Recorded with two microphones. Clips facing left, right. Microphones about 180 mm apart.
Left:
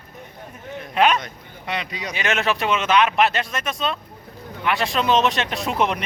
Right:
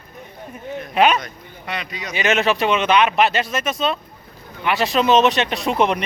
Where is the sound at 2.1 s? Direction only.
Centre (ahead or behind).